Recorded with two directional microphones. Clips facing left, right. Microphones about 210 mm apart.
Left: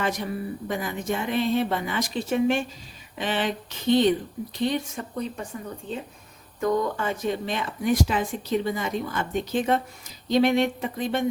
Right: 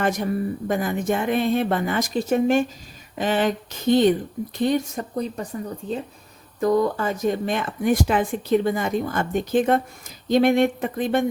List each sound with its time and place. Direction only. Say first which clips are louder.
0.0 s a woman's voice: right 5 dB; 45° right (ahead or behind)
6.6 s speech: right 4 dB; 35° right (ahead or behind); by 11.3 s 55° right (ahead or behind)